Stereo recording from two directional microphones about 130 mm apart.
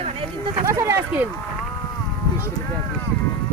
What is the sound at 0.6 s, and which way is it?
Speech, 20° right (ahead or behind).